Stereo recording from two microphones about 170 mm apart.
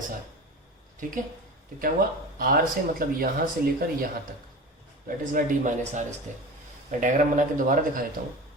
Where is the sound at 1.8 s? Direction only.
55° right (ahead or behind).